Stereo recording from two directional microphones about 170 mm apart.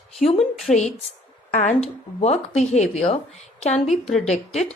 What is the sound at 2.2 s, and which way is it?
A woman's voice, 40° left (ahead or behind).